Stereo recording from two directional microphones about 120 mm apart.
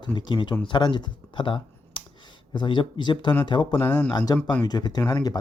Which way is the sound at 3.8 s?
15° left (ahead or behind).